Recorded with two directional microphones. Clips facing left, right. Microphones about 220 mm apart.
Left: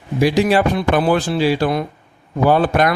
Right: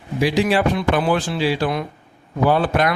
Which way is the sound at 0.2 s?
45° left (ahead or behind).